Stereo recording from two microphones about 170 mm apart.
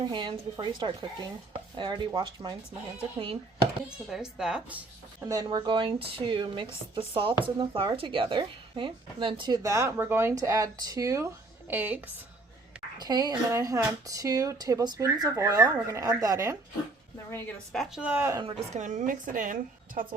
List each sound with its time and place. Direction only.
0.0 s a woman's voice: 25° right (ahead or behind)
4.1 s speech: 5° right (ahead or behind)
5.2 s a woman's voice: 20° right (ahead or behind)
13.0 s a woman's voice: 25° right (ahead or behind)
17.3 s speech: 5° left (ahead or behind); by 18.4 s 15° right (ahead or behind)
18.4 s a woman's voice: 45° right (ahead or behind)